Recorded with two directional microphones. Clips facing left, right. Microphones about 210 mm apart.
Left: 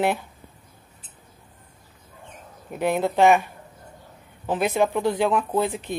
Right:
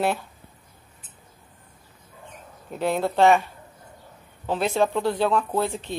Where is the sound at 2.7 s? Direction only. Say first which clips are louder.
Left 1 dB; 15° left (ahead or behind).